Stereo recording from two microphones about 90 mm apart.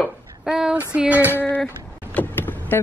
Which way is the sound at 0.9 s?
15° right (ahead or behind).